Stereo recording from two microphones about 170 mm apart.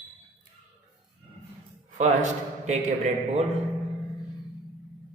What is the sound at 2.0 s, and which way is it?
Speech, 45° right (ahead or behind).